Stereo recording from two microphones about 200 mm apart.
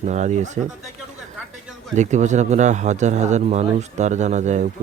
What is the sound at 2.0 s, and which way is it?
Speech, 35° right (ahead or behind).